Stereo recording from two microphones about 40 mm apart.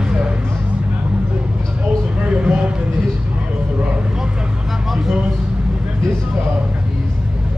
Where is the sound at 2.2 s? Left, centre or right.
Right.